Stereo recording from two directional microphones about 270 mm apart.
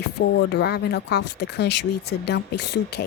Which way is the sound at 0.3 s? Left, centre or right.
Left.